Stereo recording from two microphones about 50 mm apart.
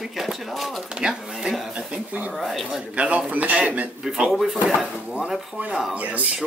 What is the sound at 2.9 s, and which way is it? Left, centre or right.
A man's voice, right.